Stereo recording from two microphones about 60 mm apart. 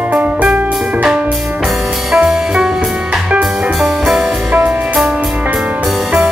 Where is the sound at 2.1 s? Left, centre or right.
Centre.